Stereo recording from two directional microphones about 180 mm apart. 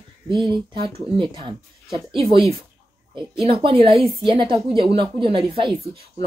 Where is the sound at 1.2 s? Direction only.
25° right (ahead or behind).